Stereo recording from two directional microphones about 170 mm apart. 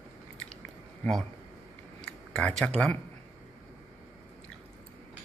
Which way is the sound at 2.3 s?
5° left (ahead or behind).